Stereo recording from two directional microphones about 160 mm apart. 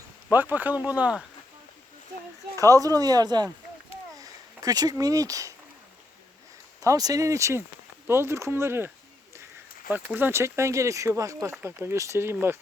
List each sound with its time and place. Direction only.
0.3 s speech: 10° right (ahead or behind)
2.6 s speech: 20° right (ahead or behind)
6.8 s speech: 20° right (ahead or behind)
10.2 s speech: 15° right (ahead or behind)